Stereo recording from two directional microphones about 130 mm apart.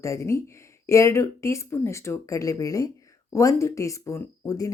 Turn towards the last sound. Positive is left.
turn(degrees=25)  # may be behind; listen again after turning